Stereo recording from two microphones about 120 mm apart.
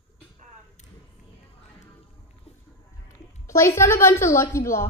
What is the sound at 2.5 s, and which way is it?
Boat, 60° left (ahead or behind).